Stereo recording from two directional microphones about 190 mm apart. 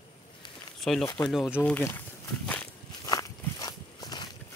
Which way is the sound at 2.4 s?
10° left (ahead or behind).